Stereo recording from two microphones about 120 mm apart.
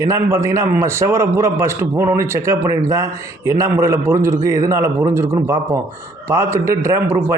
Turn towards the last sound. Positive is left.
turn(degrees=-20)  # may be behind; listen again after turning